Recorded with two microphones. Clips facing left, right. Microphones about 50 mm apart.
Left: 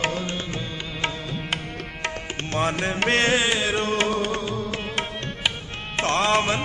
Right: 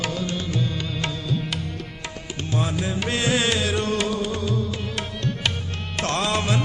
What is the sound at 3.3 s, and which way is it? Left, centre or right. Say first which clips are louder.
Music: even; left.